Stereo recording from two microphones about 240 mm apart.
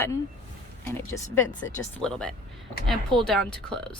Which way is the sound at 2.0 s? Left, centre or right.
Centre.